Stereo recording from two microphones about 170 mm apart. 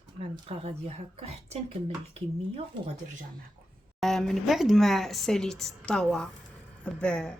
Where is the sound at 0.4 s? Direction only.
40° right (ahead or behind).